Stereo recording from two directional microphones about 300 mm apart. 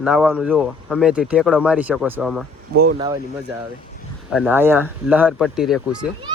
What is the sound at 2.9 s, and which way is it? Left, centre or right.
Speech, centre.